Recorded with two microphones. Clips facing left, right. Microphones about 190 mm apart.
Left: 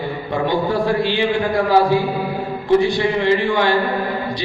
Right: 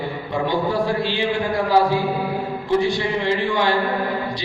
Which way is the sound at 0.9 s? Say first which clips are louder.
Left 4 dB; 60° left (ahead or behind).